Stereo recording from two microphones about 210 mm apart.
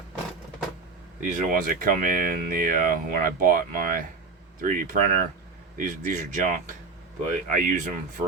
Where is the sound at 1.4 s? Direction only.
40° right (ahead or behind).